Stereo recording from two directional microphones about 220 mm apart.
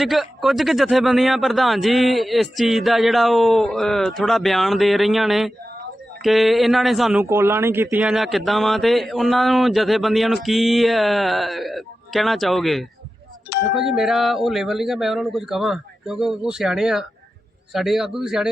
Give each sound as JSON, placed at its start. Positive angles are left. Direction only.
{"t": 0.0, "sound": "a man's voice", "side_deg": 0}